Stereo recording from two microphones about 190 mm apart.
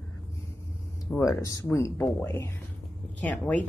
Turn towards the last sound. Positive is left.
turn(degrees=10)  # may be behind; listen again after turning